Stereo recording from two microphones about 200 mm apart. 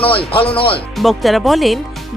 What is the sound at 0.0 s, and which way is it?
Speech, 25° left (ahead or behind).